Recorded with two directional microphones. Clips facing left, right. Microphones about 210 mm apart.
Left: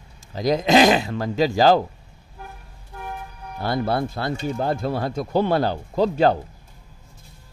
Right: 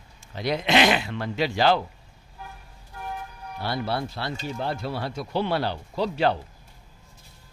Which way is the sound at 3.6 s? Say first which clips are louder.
Left 5 dB; 50° left (ahead or behind).